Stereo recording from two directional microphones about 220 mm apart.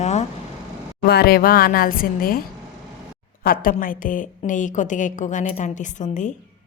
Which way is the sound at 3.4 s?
40° left (ahead or behind).